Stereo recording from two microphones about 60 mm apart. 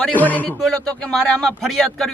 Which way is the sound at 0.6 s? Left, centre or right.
Centre.